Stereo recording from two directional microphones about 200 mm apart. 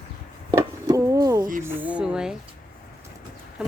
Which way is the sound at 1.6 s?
10° right (ahead or behind).